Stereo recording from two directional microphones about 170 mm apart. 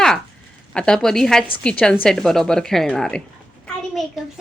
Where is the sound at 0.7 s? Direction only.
5° left (ahead or behind).